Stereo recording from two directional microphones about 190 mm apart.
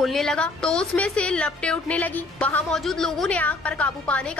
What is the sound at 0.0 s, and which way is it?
A woman's voice, centre (ahead or behind).